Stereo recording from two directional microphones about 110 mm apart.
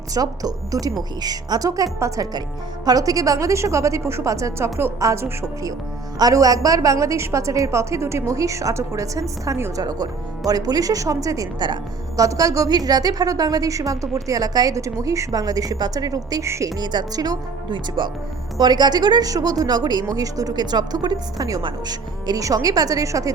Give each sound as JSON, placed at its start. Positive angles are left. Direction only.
{"t": 0.1, "sound": "a woman's voice", "side_deg": -35}